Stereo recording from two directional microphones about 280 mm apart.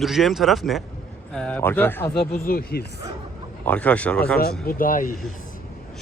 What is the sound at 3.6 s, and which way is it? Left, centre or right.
Speech, centre.